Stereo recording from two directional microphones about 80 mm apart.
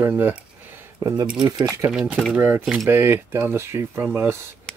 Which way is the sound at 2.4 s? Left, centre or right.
Right.